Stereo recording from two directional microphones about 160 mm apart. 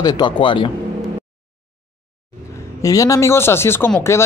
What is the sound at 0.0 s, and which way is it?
Speech, 25° left (ahead or behind).